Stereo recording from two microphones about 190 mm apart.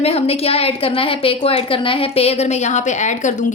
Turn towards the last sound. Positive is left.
turn(degrees=40)  # may be behind; listen again after turning